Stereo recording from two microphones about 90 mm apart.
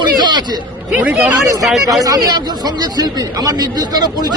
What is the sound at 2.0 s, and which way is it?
Speech, 45° right (ahead or behind).